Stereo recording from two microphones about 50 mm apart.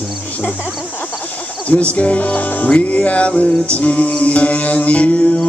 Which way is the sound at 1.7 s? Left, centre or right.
Left.